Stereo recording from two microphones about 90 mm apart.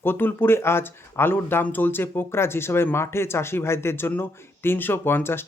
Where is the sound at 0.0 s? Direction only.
25° left (ahead or behind).